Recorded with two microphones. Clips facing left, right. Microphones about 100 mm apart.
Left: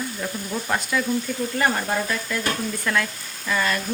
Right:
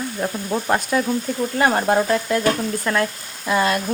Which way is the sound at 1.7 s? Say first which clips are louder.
Right 7 dB; 55° right (ahead or behind).